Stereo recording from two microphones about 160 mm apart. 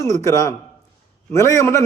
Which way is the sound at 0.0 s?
20° left (ahead or behind).